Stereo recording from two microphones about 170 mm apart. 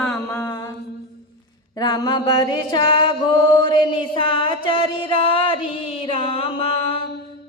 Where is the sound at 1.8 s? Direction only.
25° left (ahead or behind).